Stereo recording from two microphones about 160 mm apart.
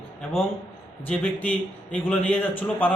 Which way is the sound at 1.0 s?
10° left (ahead or behind).